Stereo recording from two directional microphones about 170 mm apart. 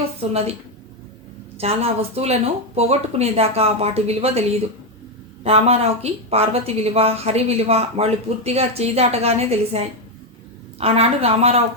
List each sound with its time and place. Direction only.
0.2 s a woman's voice: 35° right (ahead or behind)
1.5 s a woman's voice: 35° right (ahead or behind)